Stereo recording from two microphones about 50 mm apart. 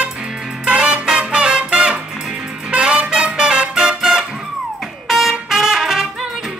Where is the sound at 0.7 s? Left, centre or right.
Right.